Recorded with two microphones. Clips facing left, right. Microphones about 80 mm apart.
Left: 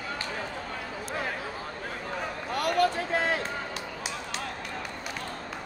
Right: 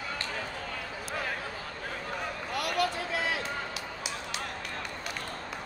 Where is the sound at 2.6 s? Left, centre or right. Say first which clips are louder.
Left 5 dB; left.